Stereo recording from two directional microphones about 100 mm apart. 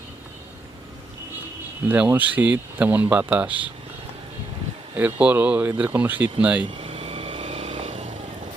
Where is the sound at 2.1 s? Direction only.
15° right (ahead or behind).